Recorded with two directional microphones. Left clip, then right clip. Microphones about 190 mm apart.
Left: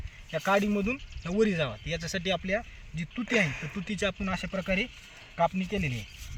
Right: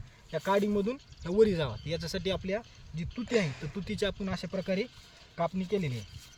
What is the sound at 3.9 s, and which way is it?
Speech, 45° right (ahead or behind).